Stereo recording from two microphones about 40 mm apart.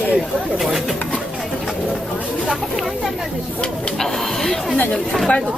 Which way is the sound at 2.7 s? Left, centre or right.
Centre.